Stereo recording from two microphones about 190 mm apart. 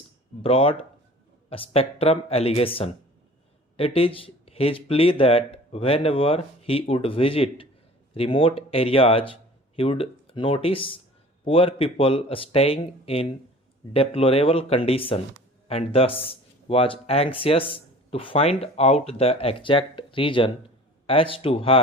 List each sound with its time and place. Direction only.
0.4 s speech: 30° left (ahead or behind)